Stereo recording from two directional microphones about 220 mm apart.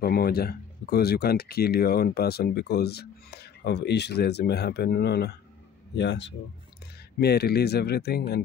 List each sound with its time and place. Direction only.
0.0 s speech: 45° left (ahead or behind)